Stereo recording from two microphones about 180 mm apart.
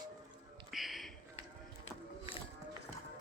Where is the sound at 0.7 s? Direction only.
Centre (ahead or behind).